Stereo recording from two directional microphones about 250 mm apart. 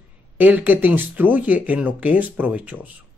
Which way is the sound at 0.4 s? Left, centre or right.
Centre.